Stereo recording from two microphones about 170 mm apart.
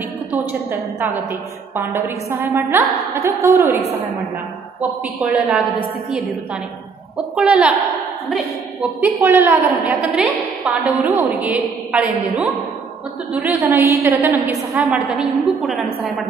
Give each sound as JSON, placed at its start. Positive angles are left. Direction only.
{"t": 0.3, "sound": "a woman's voice", "side_deg": -10}
{"t": 5.0, "sound": "a woman's voice", "side_deg": -5}
{"t": 9.0, "sound": "a woman's voice", "side_deg": -10}
{"t": 13.6, "sound": "a woman's voice", "side_deg": -15}
{"t": 14.9, "sound": "a woman's voice", "side_deg": -5}